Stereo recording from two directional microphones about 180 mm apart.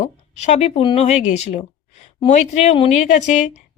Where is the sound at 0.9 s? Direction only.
35° left (ahead or behind).